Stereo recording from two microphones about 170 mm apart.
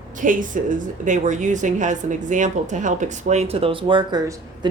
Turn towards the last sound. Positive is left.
turn(degrees=-30)  # may be behind; listen again after turning